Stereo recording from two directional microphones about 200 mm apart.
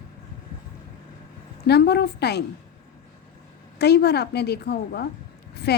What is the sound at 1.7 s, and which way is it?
Speech, 55° left (ahead or behind).